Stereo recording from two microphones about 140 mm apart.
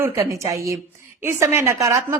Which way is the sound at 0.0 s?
20° right (ahead or behind).